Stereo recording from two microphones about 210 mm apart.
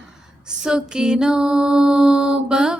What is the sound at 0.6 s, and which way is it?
Music, 5° right (ahead or behind).